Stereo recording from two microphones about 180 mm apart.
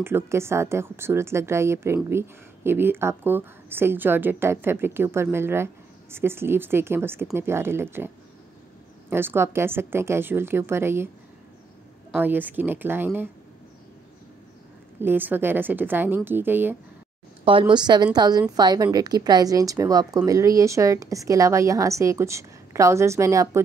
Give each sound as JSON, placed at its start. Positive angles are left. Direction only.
{"t": 0.0, "sound": "a woman's voice", "side_deg": -15}
{"t": 9.1, "sound": "a woman's voice", "side_deg": -10}
{"t": 12.2, "sound": "a woman's voice", "side_deg": -10}
{"t": 15.0, "sound": "a woman's voice", "side_deg": -10}
{"t": 17.5, "sound": "a woman's voice", "side_deg": -30}